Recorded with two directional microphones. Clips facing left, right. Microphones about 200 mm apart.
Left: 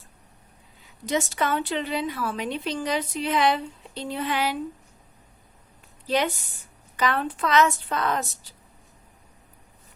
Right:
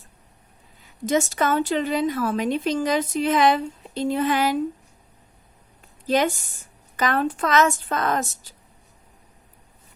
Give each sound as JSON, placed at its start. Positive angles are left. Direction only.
{"t": 1.0, "sound": "a woman's voice", "side_deg": -45}
{"t": 6.1, "sound": "a woman's voice", "side_deg": -45}